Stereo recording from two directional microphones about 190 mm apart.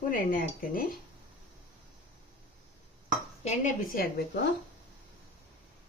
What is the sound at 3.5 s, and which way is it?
Speech, 45° left (ahead or behind).